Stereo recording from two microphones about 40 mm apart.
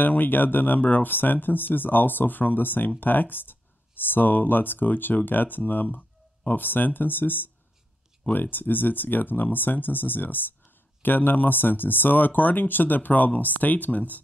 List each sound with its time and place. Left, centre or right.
0.0 s speech: left
0.8 s speech: left
1.1 s speech: left